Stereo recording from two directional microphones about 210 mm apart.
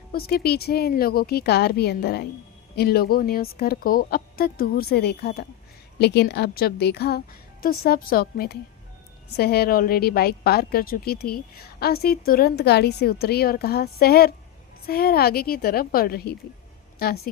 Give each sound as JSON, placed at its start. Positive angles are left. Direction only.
{"t": 0.1, "sound": "a woman's voice", "side_deg": 45}